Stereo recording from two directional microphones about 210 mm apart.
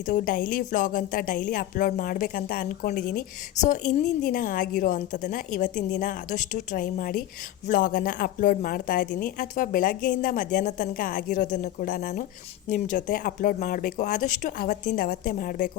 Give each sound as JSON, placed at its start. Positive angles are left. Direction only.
{"t": 0.0, "sound": "a woman's voice", "side_deg": 40}